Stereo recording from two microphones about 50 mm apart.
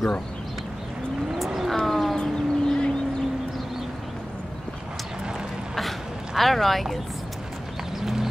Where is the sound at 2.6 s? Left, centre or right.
Centre.